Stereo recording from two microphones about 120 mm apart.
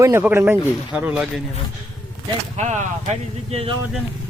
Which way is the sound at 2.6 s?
75° right (ahead or behind).